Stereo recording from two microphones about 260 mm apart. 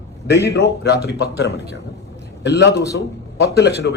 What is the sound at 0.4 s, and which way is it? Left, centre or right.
A man's voice, left.